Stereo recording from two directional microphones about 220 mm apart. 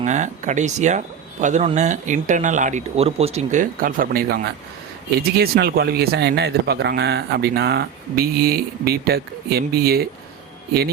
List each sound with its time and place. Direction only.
0.0 s speech: 35° right (ahead or behind)